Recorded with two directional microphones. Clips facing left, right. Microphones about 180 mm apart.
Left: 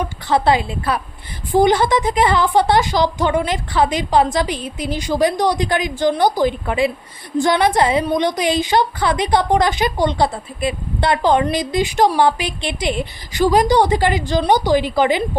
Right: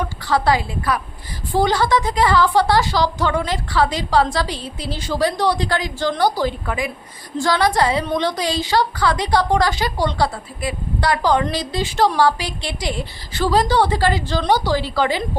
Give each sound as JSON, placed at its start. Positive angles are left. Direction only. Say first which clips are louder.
{"t": 0.0, "sound": "a woman's voice", "louder": "left 2 dB", "side_deg": 20}